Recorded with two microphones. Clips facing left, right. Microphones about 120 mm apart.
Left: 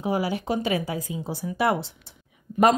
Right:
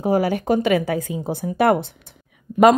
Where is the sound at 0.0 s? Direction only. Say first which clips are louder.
Right 6 dB; 45° right (ahead or behind).